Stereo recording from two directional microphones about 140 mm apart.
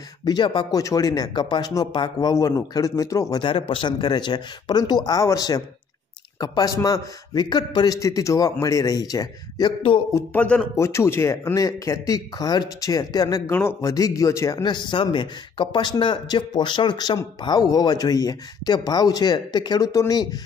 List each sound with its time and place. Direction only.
0.2 s speech: 30° left (ahead or behind)
10.1 s speech: 10° left (ahead or behind)
10.8 s speech: 20° left (ahead or behind)
13.5 s speech: 15° left (ahead or behind)